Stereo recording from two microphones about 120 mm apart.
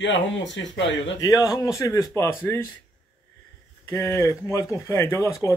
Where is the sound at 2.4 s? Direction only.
15° left (ahead or behind).